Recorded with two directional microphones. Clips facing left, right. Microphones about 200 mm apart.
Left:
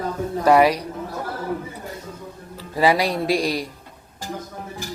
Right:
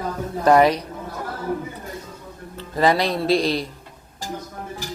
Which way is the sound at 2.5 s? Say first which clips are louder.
Even; 10° left (ahead or behind).